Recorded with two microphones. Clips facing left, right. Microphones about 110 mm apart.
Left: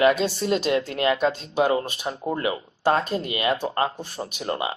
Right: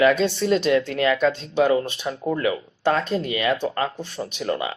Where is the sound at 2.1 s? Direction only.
35° left (ahead or behind).